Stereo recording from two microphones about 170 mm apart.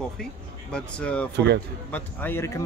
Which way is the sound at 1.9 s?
10° left (ahead or behind).